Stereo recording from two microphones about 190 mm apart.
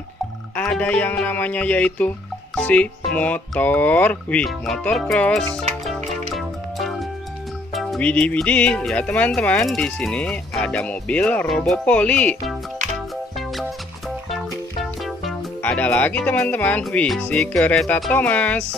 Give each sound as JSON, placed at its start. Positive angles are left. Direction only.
{"t": 0.6, "sound": "speech", "side_deg": 5}
{"t": 6.3, "sound": "music", "side_deg": 0}
{"t": 7.7, "sound": "speech", "side_deg": 0}
{"t": 14.3, "sound": "speech", "side_deg": 0}